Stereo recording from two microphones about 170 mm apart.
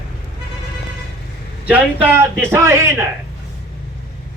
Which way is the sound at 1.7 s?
10° right (ahead or behind).